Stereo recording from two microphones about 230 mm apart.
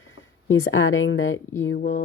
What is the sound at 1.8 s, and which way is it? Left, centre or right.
Music, left.